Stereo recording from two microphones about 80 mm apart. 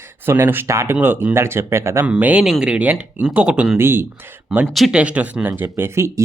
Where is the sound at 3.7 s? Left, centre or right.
Right.